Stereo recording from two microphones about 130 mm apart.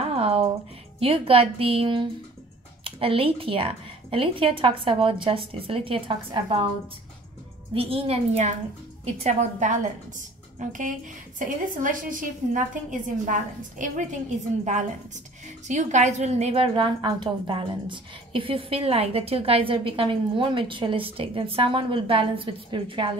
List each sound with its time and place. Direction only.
0.0 s a sound: 50° right (ahead or behind)
0.9 s a woman's voice: 45° right (ahead or behind)
7.7 s a woman's voice: 45° right (ahead or behind); by 14.0 s 80° right
15.4 s a woman's voice: 65° right (ahead or behind); by 23.1 s 40° right (ahead or behind)